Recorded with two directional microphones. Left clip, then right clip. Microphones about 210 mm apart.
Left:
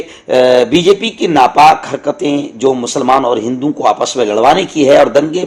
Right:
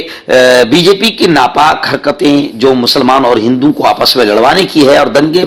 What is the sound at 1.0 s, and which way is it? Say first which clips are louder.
A man's voice: right 2 dB; 20° right (ahead or behind).